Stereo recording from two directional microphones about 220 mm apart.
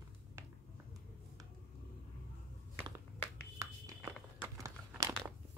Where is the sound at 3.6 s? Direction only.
15° right (ahead or behind).